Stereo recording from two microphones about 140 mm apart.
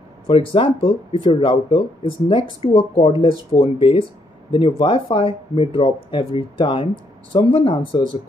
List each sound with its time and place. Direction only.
0.3 s speech: 40° left (ahead or behind)